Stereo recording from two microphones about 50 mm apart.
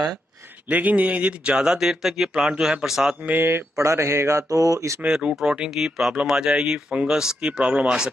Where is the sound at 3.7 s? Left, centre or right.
Right.